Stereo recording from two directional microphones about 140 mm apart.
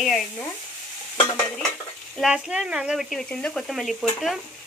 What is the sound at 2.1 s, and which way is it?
Speech, 5° right (ahead or behind).